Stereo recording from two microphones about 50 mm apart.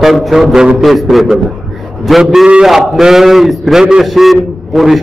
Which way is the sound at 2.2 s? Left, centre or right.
Centre.